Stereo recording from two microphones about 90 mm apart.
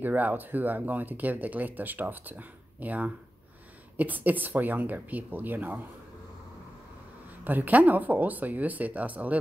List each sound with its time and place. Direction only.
0.0 s speech: 20° right (ahead or behind)
7.4 s speech: 20° right (ahead or behind)